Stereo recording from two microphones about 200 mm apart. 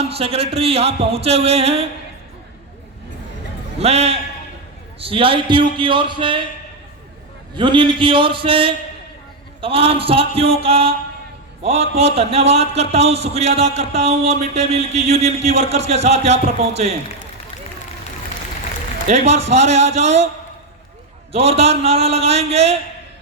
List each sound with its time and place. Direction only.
0.0 s speech: 30° right (ahead or behind)
3.8 s a man's voice: 30° right (ahead or behind)
7.5 s a man's voice: 25° right (ahead or behind)
19.0 s a man's voice: 35° right (ahead or behind)
21.3 s a man's voice: 30° right (ahead or behind)